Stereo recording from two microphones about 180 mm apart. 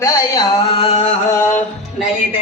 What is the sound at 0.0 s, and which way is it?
Music, 20° left (ahead or behind).